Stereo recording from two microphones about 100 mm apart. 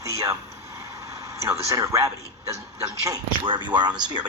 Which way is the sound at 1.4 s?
30° right (ahead or behind).